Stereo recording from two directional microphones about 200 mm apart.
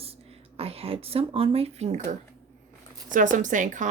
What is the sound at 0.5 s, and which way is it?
Speech, 30° right (ahead or behind).